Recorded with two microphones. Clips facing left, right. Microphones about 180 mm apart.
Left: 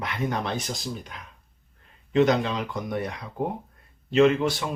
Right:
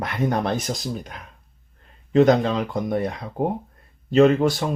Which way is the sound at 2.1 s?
40° right (ahead or behind).